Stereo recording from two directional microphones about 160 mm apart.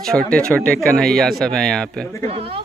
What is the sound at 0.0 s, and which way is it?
Speech, 5° left (ahead or behind).